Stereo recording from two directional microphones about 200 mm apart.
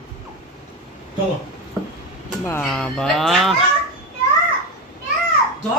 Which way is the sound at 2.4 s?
5° left (ahead or behind).